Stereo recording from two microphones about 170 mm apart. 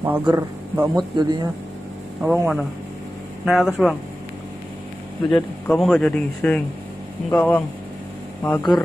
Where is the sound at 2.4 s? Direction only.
Centre (ahead or behind).